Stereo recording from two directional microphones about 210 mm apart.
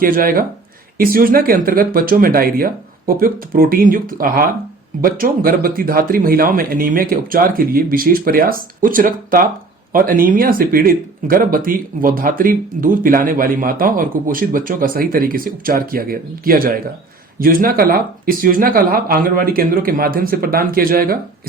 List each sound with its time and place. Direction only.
0.0 s speech: 45° right (ahead or behind)